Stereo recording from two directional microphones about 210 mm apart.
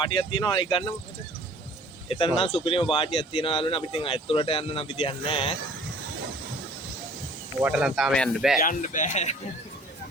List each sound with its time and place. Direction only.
0.0 s speech: 25° left (ahead or behind)
2.0 s speech: 25° left (ahead or behind)
7.6 s speech: 5° right (ahead or behind)
8.5 s speech: 40° left (ahead or behind)